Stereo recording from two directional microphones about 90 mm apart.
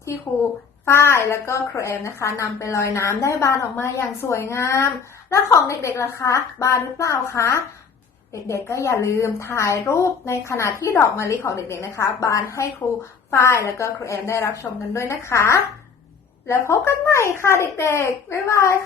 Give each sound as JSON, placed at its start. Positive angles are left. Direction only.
{"t": 0.9, "sound": "speech", "side_deg": 30}